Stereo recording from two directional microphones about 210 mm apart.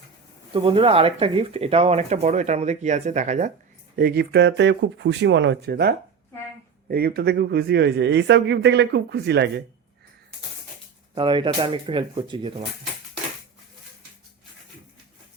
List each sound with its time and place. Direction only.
0.5 s a man's voice: 25° right (ahead or behind); by 9.6 s 55° right (ahead or behind)
11.1 s speech: 20° right (ahead or behind)